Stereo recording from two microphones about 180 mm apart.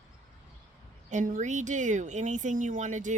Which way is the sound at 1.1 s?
45° right (ahead or behind).